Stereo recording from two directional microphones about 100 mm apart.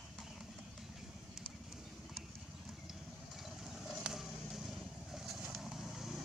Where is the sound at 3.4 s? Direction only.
Centre (ahead or behind).